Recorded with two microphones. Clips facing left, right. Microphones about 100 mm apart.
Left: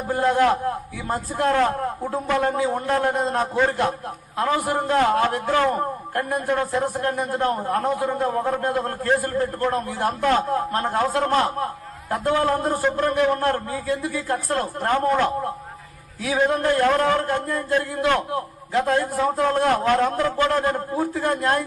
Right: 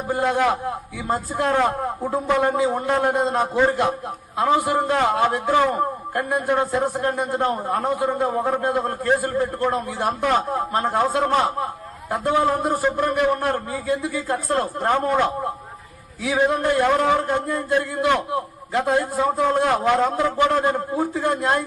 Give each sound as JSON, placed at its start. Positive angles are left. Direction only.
{"t": 0.1, "sound": "a man's voice", "side_deg": -10}
{"t": 1.0, "sound": "a man's voice", "side_deg": -25}
{"t": 13.8, "sound": "a man's voice", "side_deg": -20}
{"t": 16.3, "sound": "a man's voice", "side_deg": -15}
{"t": 20.1, "sound": "a man's voice", "side_deg": -25}